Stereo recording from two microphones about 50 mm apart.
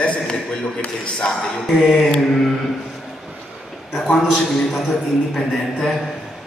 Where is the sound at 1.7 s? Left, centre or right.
Centre.